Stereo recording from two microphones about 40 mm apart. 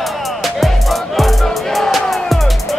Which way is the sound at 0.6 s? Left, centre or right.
Centre.